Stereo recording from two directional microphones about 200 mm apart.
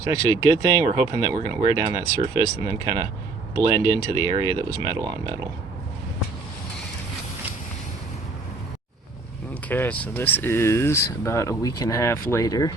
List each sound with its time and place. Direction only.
0.0 s speech: 15° right (ahead or behind)
9.6 s speech: 10° left (ahead or behind)